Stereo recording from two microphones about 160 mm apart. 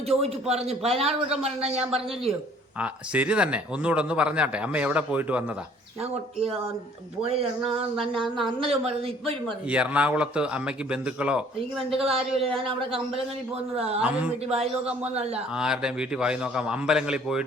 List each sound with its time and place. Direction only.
0.2 s a man's voice: 40° right (ahead or behind)
2.7 s a man's voice: 10° right (ahead or behind)
6.0 s a man's voice: 40° right (ahead or behind)
8.0 s a man's voice: 30° right (ahead or behind)
9.6 s a man's voice: 5° right (ahead or behind)
11.8 s a man's voice: 35° right (ahead or behind)
14.0 s a man's voice: 5° right (ahead or behind)
14.4 s a man's voice: 40° right (ahead or behind)
15.5 s a man's voice: 5° right (ahead or behind)